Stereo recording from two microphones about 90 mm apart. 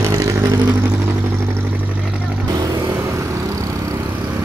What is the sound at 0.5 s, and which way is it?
Vehicle, 50° right (ahead or behind).